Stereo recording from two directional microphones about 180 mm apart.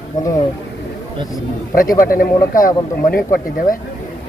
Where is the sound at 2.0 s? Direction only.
50° left (ahead or behind).